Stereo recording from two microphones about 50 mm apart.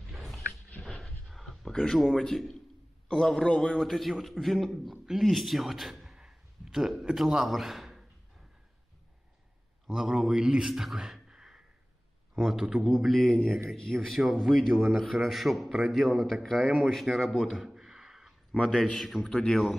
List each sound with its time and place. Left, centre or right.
0.0 s dog: centre
1.0 s a sound: centre
1.8 s a man's voice: centre
6.1 s a sound: centre
6.9 s a man's voice: centre
9.8 s a man's voice: centre
12.4 s a man's voice: centre
12.9 s a man's voice: centre
17.6 s a sound: centre
18.6 s a man's voice: centre
18.9 s a man's voice: centre
19.3 s a man's voice: centre